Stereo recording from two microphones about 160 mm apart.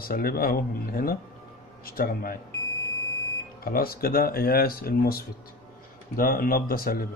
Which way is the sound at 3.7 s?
70° left (ahead or behind).